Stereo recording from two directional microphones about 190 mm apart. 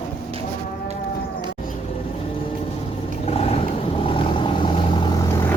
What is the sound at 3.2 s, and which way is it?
Vehicle, 35° left (ahead or behind).